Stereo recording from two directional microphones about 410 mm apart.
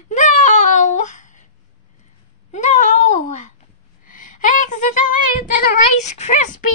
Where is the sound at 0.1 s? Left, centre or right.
Centre.